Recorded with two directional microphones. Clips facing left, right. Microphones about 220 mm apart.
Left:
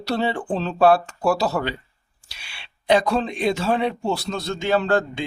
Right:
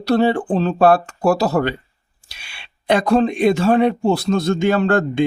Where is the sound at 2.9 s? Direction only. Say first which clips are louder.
Right 4 dB; 50° right (ahead or behind).